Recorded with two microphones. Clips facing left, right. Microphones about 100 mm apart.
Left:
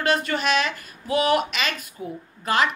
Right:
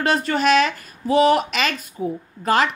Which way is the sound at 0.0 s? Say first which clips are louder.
Right 4 dB; 40° right (ahead or behind).